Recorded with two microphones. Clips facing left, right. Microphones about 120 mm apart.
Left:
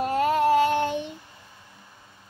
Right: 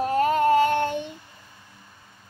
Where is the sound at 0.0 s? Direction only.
5° left (ahead or behind).